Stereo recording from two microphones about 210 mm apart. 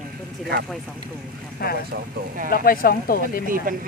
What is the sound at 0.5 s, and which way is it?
Speech, 50° right (ahead or behind).